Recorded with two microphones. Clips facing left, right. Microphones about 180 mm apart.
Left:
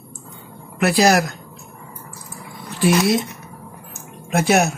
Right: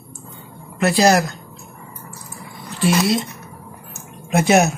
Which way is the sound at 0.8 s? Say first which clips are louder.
Right 1 dB; 10° left (ahead or behind).